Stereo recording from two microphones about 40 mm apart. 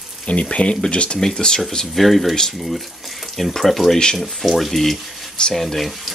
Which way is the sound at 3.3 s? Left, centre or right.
Centre.